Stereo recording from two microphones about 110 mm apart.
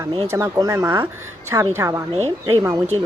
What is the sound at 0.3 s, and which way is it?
Speech, 25° right (ahead or behind).